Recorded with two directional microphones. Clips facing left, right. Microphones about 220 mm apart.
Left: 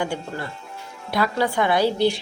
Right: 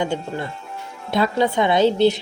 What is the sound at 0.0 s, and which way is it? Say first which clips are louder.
Speech: right 3 dB; 20° right (ahead or behind).